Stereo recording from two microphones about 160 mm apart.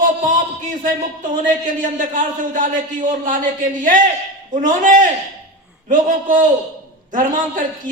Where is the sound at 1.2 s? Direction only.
55° right (ahead or behind).